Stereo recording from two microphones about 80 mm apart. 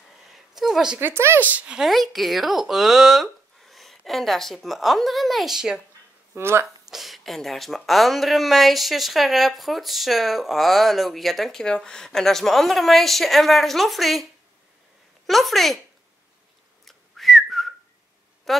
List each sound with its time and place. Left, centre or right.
0.2 s a sound: centre
0.9 s speech: right
1.5 s speech: centre
1.8 s speech: centre
6.3 s speech: right
6.9 s speech: centre
15.2 s speech: centre
16.8 s whistling: centre
18.5 s a woman's voice: centre